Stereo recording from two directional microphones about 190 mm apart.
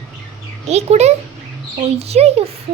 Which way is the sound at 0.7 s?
35° right (ahead or behind).